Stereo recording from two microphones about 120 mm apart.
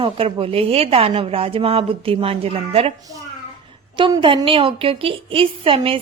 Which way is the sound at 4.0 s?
45° right (ahead or behind).